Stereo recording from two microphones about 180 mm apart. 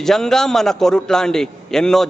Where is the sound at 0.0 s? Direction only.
Centre (ahead or behind).